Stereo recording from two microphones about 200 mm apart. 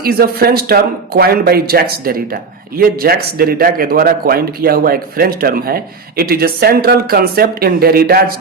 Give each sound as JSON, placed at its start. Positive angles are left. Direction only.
{"t": 0.0, "sound": "speech", "side_deg": -50}